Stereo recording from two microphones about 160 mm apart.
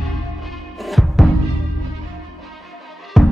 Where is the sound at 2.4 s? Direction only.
Centre (ahead or behind).